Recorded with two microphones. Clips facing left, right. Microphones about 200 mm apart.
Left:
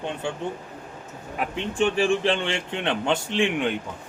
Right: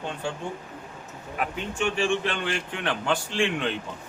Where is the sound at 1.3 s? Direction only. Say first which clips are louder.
Left 4 dB; 35° left (ahead or behind); by 3.7 s 15° left (ahead or behind).